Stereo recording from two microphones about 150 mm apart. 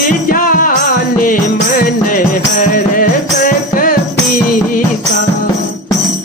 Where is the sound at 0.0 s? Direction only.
65° left (ahead or behind).